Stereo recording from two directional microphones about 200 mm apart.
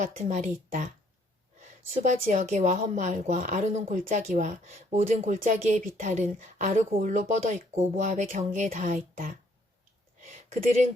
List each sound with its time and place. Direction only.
0.0 s a woman's voice: 35° right (ahead or behind)
1.9 s a woman's voice: 35° right (ahead or behind)